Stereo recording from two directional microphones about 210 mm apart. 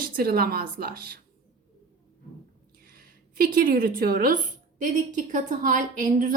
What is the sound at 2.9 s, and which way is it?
A woman's voice, 40° right (ahead or behind).